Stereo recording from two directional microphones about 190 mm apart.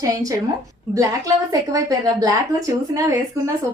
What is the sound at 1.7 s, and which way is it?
A woman's voice, 20° right (ahead or behind).